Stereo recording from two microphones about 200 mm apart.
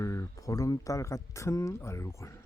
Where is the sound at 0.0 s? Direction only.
15° left (ahead or behind).